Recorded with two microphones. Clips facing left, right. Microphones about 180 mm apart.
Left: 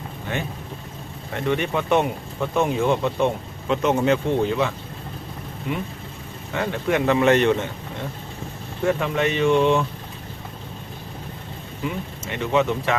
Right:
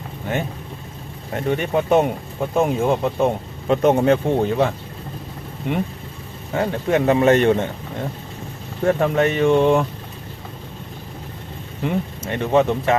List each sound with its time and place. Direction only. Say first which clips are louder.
1.5 s speech: right 3 dB; 40° right (ahead or behind)
3.7 s speech: right 4 dB; 50° right (ahead or behind)
6.5 s speech: right 3 dB; 35° right (ahead or behind)
8.8 s speech: right 4 dB; 45° right (ahead or behind)
11.8 s speech: right 6 dB; 50° right (ahead or behind)